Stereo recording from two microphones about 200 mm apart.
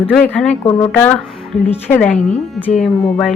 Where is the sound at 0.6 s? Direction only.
20° left (ahead or behind).